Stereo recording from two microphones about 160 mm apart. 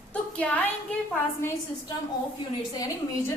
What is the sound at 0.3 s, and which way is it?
Speech, 10° left (ahead or behind).